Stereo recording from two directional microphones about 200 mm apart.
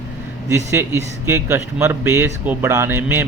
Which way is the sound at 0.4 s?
15° right (ahead or behind).